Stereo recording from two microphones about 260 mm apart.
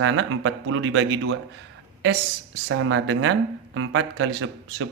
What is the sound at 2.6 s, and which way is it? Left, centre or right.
Speech, right.